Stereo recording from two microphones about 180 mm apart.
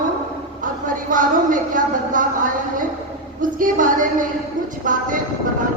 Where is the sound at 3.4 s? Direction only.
50° right (ahead or behind).